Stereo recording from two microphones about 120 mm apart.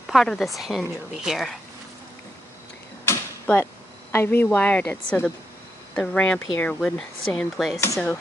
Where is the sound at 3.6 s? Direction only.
20° left (ahead or behind).